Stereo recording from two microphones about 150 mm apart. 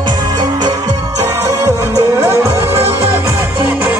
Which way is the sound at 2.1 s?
15° right (ahead or behind).